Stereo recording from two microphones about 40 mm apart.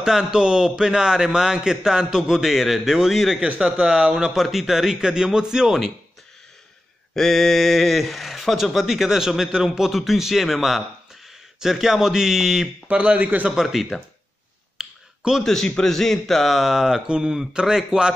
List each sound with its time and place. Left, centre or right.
0.0 s a man's voice: centre
3.4 s speech: right
4.3 s a man's voice: centre
7.2 s a man's voice: centre
12.9 s a man's voice: right
13.6 s a man's voice: centre
14.8 s a sound: centre
15.4 s a man's voice: centre
16.4 s a man's voice: centre